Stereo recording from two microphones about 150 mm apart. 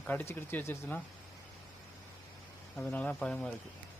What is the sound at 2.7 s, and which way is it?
Speech, 10° left (ahead or behind).